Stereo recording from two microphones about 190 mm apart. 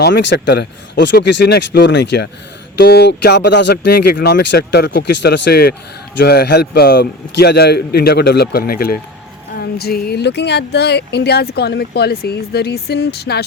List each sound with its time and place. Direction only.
0.0 s speech: 70° left (ahead or behind)